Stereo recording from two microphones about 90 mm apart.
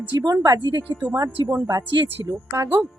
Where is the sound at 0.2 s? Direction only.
45° right (ahead or behind).